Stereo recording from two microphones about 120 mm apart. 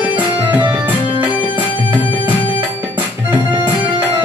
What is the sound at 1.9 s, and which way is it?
Music, 15° right (ahead or behind).